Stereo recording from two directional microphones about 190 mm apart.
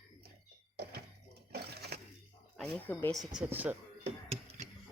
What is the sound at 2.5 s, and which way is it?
Speech, 5° left (ahead or behind).